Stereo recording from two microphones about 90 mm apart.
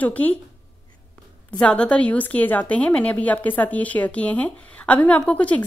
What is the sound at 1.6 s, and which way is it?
A woman's voice, 15° left (ahead or behind).